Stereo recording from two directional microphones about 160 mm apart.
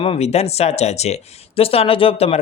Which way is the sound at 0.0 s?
40° left (ahead or behind).